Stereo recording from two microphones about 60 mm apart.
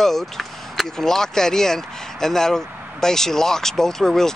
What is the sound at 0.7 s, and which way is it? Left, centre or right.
Speech, centre.